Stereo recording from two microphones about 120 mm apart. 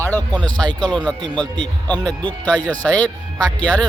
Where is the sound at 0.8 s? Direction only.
5° left (ahead or behind).